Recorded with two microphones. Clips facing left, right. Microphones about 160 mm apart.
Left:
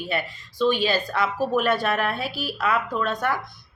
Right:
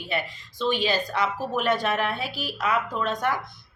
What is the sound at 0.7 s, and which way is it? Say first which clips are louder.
A woman's voice: right 1 dB; 20° right (ahead or behind).